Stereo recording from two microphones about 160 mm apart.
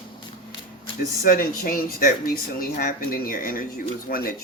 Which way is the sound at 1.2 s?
65° left (ahead or behind).